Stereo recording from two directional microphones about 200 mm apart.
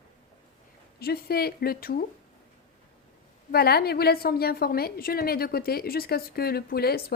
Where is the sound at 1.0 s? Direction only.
50° left (ahead or behind).